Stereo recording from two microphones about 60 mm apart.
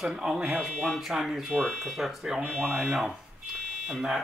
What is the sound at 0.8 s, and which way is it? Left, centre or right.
Speech, centre.